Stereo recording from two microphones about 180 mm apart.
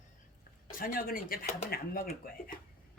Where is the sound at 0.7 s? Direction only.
50° left (ahead or behind).